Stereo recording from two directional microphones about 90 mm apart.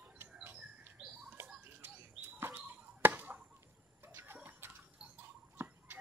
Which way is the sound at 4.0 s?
25° right (ahead or behind).